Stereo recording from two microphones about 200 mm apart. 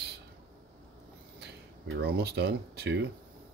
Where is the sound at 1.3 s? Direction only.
60° right (ahead or behind).